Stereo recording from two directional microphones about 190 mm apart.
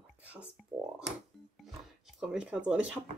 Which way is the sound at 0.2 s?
5° right (ahead or behind).